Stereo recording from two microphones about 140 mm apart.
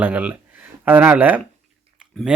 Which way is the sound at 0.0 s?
10° right (ahead or behind).